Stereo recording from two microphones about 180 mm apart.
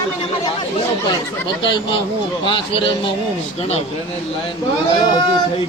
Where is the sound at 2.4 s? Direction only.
30° left (ahead or behind).